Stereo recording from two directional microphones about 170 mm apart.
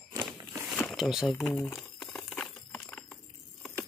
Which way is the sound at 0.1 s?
25° right (ahead or behind).